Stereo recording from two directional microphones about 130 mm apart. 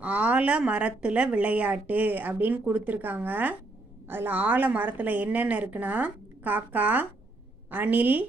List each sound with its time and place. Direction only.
0.0 s a woman's voice: 10° right (ahead or behind)